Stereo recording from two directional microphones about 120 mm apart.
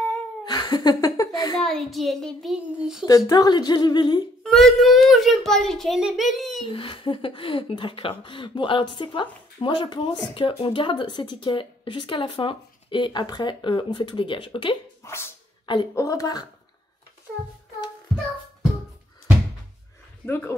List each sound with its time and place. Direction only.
0.5 s speech: 35° left (ahead or behind)
1.6 s a child's voice: centre (ahead or behind)
3.3 s a sound: 35° left (ahead or behind)
4.4 s a child's voice: 5° left (ahead or behind)
6.6 s speech: 45° left (ahead or behind)
15.0 s a woman's voice: 20° left (ahead or behind)
15.6 s speech: 40° left (ahead or behind)
15.9 s a woman's voice: 25° left (ahead or behind)
20.2 s a woman's voice: 20° left (ahead or behind)